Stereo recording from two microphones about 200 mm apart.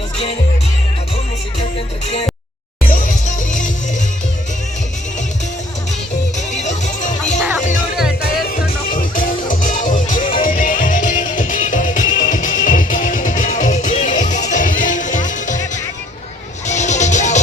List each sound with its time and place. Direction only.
2.9 s music: 40° left (ahead or behind)
6.5 s music: 35° left (ahead or behind)